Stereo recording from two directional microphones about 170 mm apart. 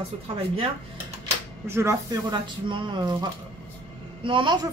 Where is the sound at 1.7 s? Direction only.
15° right (ahead or behind).